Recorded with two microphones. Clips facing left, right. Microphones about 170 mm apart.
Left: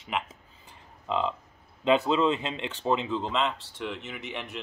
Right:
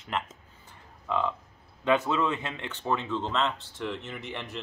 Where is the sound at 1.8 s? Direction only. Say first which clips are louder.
Left 3 dB; 15° left (ahead or behind).